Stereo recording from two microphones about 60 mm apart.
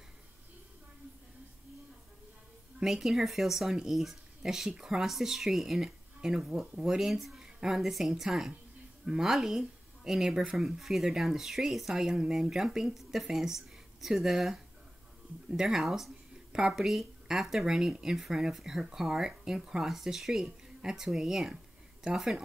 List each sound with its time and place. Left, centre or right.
2.8 s speech: centre